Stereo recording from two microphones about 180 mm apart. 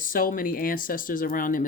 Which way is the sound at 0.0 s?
50° left (ahead or behind).